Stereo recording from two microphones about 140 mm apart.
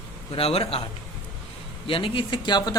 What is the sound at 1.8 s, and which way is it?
Speech, 40° left (ahead or behind).